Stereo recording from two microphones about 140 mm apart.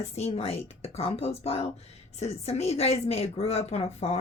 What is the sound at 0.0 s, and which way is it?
Speech, 50° left (ahead or behind).